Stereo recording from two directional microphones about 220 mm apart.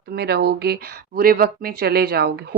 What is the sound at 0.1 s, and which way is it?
Speech, 45° right (ahead or behind).